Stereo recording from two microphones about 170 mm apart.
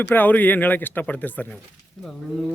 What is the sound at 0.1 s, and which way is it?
Speech, 10° left (ahead or behind).